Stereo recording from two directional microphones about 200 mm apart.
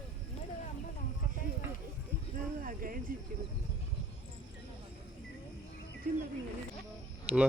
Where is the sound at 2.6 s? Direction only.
45° right (ahead or behind).